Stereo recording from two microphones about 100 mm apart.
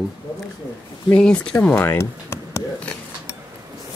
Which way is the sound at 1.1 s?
10° left (ahead or behind).